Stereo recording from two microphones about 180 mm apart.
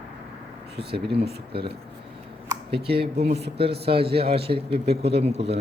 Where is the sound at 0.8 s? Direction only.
65° right (ahead or behind).